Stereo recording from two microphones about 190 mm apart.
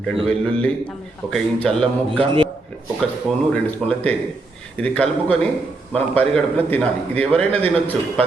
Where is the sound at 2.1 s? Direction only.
30° right (ahead or behind).